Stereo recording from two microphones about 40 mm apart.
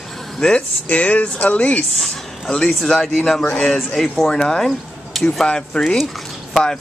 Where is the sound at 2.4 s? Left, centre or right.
Centre.